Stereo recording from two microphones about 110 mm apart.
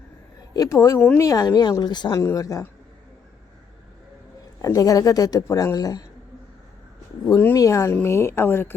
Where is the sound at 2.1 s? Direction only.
30° left (ahead or behind).